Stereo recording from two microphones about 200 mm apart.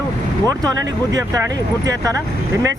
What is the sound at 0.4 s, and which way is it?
Speech, 15° right (ahead or behind).